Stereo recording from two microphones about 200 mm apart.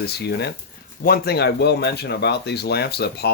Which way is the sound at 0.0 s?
55° left (ahead or behind).